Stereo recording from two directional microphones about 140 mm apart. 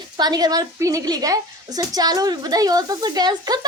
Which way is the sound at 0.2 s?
30° right (ahead or behind).